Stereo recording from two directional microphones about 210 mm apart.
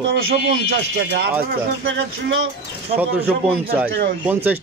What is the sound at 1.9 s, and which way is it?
Speech, 65° right (ahead or behind).